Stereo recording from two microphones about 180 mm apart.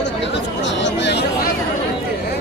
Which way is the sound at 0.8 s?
75° left (ahead or behind).